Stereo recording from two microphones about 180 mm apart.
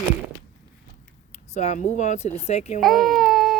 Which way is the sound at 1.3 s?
40° left (ahead or behind).